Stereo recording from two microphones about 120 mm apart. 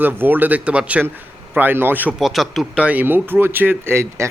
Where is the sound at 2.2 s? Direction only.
Centre (ahead or behind).